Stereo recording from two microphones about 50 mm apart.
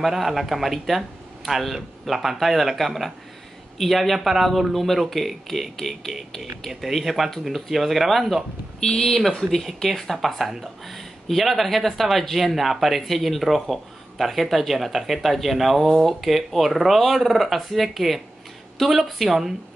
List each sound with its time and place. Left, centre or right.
0.0 s speech: centre
8.7 s speech: centre
9.0 s speech: centre